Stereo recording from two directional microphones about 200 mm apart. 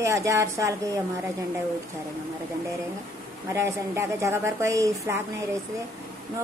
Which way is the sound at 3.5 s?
15° right (ahead or behind).